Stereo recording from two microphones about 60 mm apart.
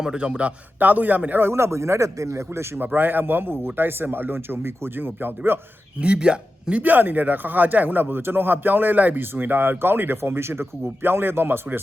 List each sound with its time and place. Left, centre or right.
0.0 s a man's voice: centre
1.5 s speech: right
6.0 s speech: centre; by 11.8 s right